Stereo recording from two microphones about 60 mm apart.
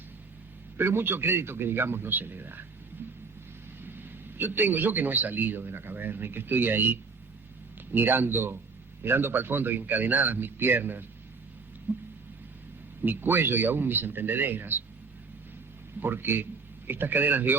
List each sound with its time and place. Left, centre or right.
0.8 s a man's voice: right
3.0 s a sound: right
3.8 s a man's voice: right
13.0 s a man's voice: right
16.0 s a man's voice: right